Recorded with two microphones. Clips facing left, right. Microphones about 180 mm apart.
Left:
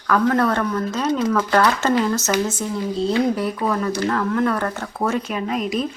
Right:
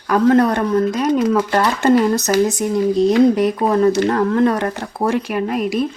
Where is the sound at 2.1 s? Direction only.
35° right (ahead or behind).